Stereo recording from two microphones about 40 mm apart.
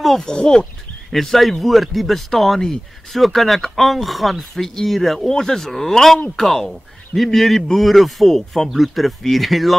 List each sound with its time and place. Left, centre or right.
0.2 s speech: centre
1.1 s speech: centre